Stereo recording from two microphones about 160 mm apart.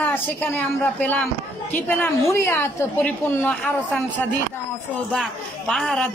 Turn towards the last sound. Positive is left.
turn(degrees=0)  # may be behind; listen again after turning